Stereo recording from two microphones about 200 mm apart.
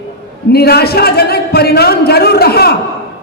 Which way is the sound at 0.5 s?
50° left (ahead or behind).